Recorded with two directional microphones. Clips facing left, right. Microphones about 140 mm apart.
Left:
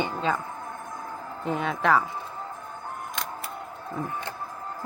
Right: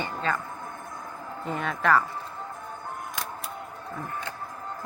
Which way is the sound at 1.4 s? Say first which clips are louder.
Left 2 dB; 5° left (ahead or behind).